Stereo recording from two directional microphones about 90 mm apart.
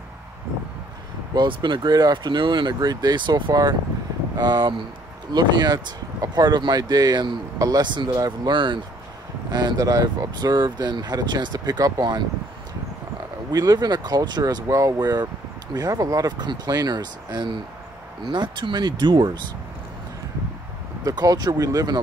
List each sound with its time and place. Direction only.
1.3 s speech: 55° right (ahead or behind)
9.5 s speech: 50° right (ahead or behind)
13.5 s speech: 45° right (ahead or behind)
21.0 s speech: 45° right (ahead or behind)